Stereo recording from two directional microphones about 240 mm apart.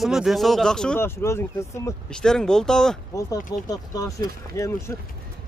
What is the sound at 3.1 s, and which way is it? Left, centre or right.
Speech, centre.